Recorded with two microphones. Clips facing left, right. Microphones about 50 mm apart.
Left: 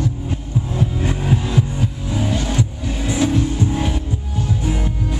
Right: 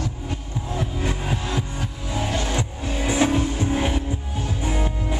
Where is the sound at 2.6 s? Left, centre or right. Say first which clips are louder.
Left 3 dB; right.